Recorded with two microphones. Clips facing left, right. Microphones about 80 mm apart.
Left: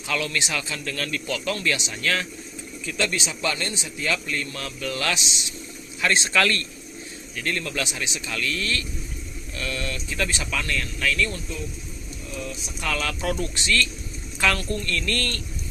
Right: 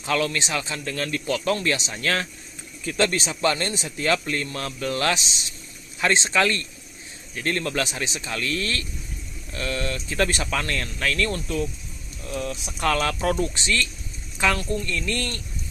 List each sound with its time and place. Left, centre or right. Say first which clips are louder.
0.1 s a man's voice: right 3 dB; right
7.3 s a man's voice: right 3 dB; right
11.4 s speech: right 7 dB; right
12.3 s speech: right 5 dB; right
12.8 s a man's voice: right 5 dB; right
14.4 s speech: right 1 dB; centre